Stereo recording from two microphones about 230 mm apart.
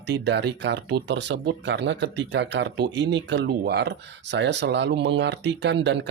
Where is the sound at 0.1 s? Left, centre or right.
Right.